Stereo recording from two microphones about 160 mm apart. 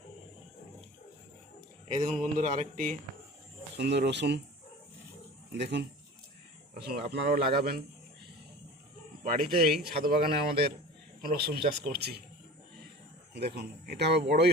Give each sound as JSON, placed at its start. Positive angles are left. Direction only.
{"t": 2.2, "sound": "a sound", "side_deg": -50}
{"t": 3.8, "sound": "speech", "side_deg": -90}
{"t": 5.5, "sound": "speech", "side_deg": -90}
{"t": 9.2, "sound": "speech", "side_deg": -65}
{"t": 13.3, "sound": "speech", "side_deg": -90}